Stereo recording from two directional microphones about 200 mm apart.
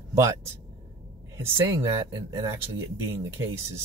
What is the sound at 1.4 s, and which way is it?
Speech, 15° right (ahead or behind).